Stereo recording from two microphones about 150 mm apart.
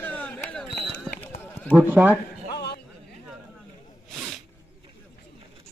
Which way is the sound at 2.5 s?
90° left.